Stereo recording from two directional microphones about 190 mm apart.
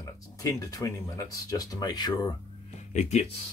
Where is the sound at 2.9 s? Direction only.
35° left (ahead or behind).